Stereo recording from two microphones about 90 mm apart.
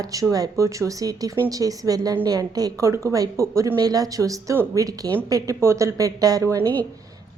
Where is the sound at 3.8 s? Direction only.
45° right (ahead or behind).